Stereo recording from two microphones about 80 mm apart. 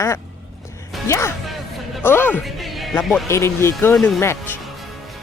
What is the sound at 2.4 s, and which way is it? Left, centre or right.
Music, centre.